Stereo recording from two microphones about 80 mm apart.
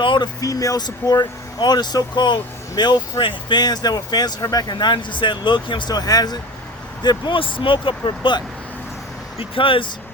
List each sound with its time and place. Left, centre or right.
0.0 s a sound: left
0.4 s speech: left
0.9 s speech: left
4.8 s speech: left
7.0 s speech: left
9.6 s speech: left